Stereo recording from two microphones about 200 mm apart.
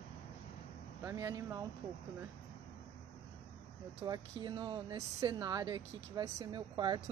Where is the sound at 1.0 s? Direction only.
15° right (ahead or behind).